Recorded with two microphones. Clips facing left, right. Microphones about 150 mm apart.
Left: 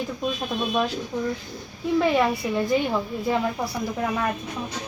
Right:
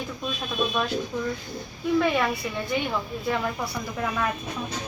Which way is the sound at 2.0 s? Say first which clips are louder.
Left 3 dB; 25° left (ahead or behind).